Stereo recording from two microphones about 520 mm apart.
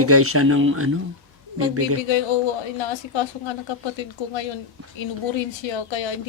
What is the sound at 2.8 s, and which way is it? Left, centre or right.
Speech, left.